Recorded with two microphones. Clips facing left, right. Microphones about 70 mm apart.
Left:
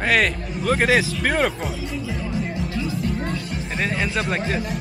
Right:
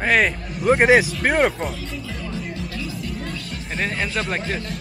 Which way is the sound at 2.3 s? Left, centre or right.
Left.